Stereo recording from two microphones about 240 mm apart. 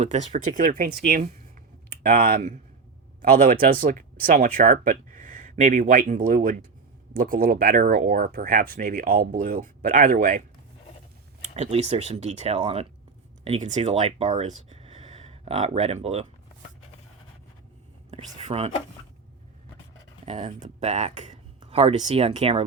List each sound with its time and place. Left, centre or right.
0.0 s speech: right
11.5 s speech: right
18.1 s speech: right
20.2 s speech: right